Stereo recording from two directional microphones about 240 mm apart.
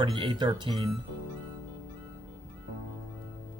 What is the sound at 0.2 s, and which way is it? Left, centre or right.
Speech, centre.